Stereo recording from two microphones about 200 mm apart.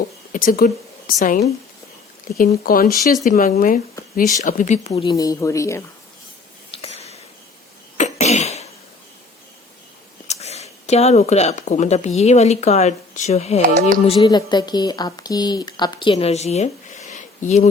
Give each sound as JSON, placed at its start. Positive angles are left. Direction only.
{"t": 0.3, "sound": "a woman's voice", "side_deg": 45}
{"t": 6.7, "sound": "a sound", "side_deg": 30}
{"t": 7.9, "sound": "cough", "side_deg": 35}
{"t": 10.2, "sound": "speech", "side_deg": 30}
{"t": 14.1, "sound": "a woman's voice", "side_deg": 20}